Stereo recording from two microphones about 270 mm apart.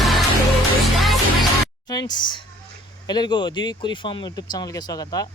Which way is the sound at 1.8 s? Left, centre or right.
Centre.